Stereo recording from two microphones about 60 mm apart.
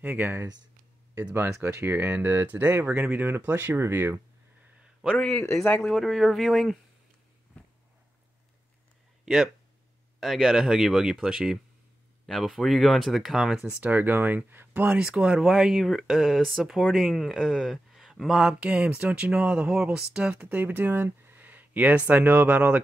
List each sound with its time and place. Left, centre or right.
0.0 s speech: right
1.6 s speech: right
5.1 s speech: centre
5.4 s speech: left
5.9 s speech: centre
7.5 s a sound: left
9.2 s speech: centre
13.7 s speech: right
15.0 s speech: centre
17.9 s a sound: centre
18.4 s speech: centre
20.4 s speech: right